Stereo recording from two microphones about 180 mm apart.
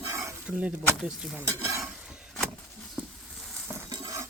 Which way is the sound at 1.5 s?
15° right (ahead or behind).